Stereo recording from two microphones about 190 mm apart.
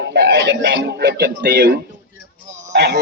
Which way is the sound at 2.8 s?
65° right (ahead or behind).